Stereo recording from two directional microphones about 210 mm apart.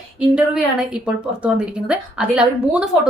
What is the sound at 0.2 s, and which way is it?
A woman's voice, 5° right (ahead or behind).